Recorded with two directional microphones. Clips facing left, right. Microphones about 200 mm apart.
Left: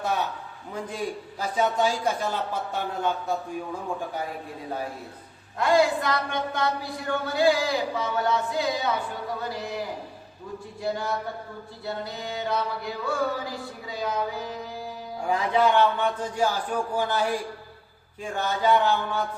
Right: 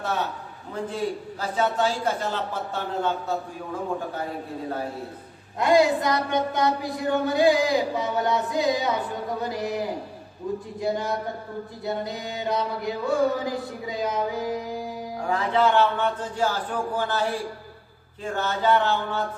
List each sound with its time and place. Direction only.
0.9 s a man's voice: 15° left (ahead or behind)
5.5 s music: 20° right (ahead or behind)
15.3 s a man's voice: 15° left (ahead or behind)